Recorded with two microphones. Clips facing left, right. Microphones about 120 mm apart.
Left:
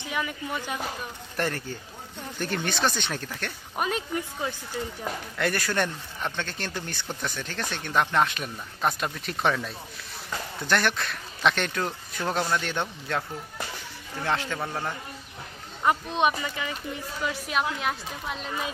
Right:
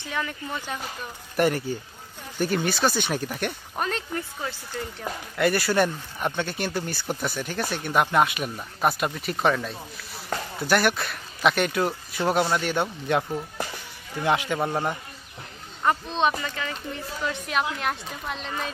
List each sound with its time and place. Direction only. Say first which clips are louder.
0.0 s speech: even; 10° left (ahead or behind)
1.3 s speech: right 7 dB; 10° right (ahead or behind)
3.7 s speech: left 5 dB; 10° left (ahead or behind)
5.4 s speech: right 5 dB; 5° right (ahead or behind)
14.2 s speech: right 5 dB; 15° right (ahead or behind)
15.8 s speech: even; 10° left (ahead or behind)